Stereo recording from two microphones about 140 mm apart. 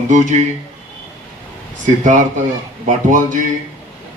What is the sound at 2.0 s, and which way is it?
A man's voice, 65° right (ahead or behind).